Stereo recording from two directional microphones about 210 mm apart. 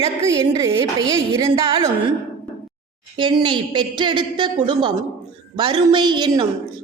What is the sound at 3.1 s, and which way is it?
A woman's voice, 25° right (ahead or behind).